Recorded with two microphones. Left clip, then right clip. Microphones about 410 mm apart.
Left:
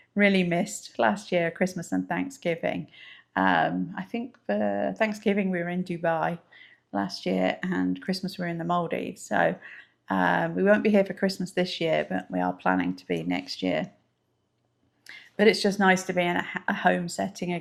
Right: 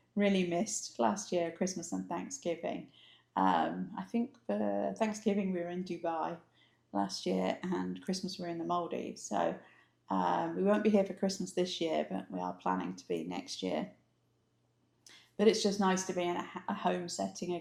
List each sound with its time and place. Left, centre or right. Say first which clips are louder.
0.1 s speech: left 9 dB; left
15.0 s speech: left 7 dB; left